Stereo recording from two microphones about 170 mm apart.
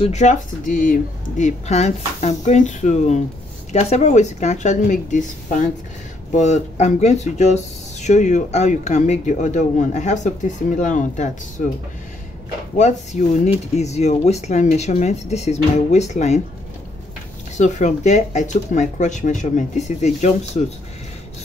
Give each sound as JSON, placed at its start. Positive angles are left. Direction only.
{"t": 0.0, "sound": "speech", "side_deg": 45}
{"t": 1.4, "sound": "speech", "side_deg": 40}
{"t": 12.7, "sound": "speech", "side_deg": 45}
{"t": 17.6, "sound": "speech", "side_deg": 45}